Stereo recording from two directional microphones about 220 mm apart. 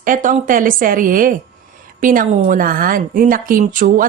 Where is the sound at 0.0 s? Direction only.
35° right (ahead or behind).